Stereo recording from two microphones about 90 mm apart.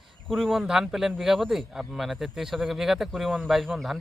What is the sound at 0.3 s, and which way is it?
A man's voice, centre (ahead or behind).